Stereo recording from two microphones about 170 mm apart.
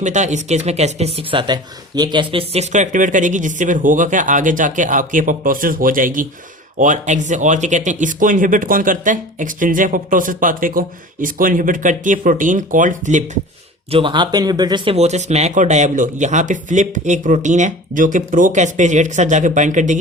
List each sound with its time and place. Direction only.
0.0 s speech: 45° right (ahead or behind)
13.9 s speech: 30° right (ahead or behind)
14.9 s speech: 40° right (ahead or behind)